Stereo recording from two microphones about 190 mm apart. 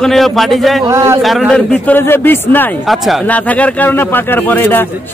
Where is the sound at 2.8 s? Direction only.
Centre (ahead or behind).